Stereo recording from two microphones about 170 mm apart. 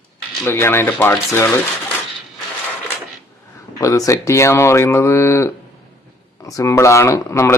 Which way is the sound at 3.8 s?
20° left (ahead or behind).